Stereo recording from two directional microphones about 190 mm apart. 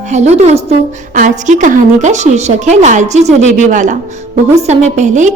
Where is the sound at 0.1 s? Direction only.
35° right (ahead or behind).